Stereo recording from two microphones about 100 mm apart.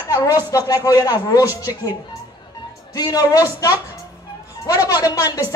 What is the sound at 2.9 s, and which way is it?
Speech, 35° left (ahead or behind).